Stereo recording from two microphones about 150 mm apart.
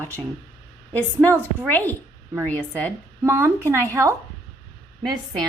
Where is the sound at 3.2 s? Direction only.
20° right (ahead or behind).